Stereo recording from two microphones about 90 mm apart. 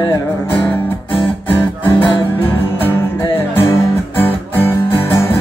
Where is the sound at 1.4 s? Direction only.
20° left (ahead or behind).